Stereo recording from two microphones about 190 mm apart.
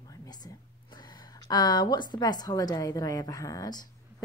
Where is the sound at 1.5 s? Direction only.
20° left (ahead or behind).